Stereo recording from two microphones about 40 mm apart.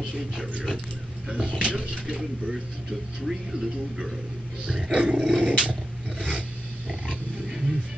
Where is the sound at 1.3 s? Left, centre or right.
Right.